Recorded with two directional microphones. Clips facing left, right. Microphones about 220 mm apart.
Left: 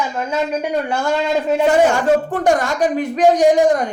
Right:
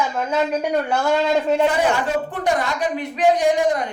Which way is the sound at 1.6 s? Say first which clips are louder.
Left 6 dB; 45° left (ahead or behind).